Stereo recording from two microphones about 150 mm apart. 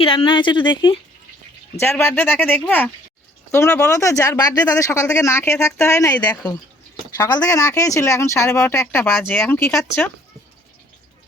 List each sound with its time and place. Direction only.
0.0 s speech: 40° left (ahead or behind)
1.8 s speech: 15° left (ahead or behind)
7.2 s speech: 25° left (ahead or behind)